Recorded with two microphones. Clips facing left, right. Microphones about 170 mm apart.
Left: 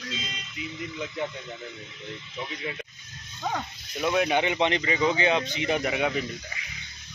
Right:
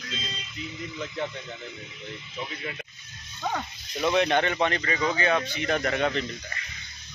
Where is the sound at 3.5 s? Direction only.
5° left (ahead or behind).